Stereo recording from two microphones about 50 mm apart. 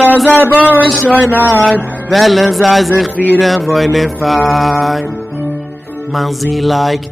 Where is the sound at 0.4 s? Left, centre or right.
Right.